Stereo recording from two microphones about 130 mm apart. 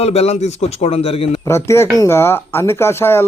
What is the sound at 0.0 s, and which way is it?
A man's voice, 55° left (ahead or behind).